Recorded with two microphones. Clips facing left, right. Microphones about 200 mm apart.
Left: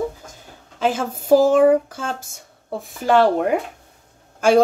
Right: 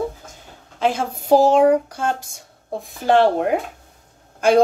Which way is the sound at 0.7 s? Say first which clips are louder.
Even; 45° left (ahead or behind).